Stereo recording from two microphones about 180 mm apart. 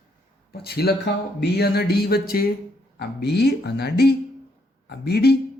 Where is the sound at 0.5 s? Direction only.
60° left (ahead or behind).